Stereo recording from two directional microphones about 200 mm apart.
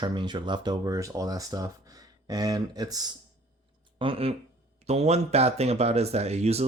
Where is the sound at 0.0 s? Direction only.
20° right (ahead or behind).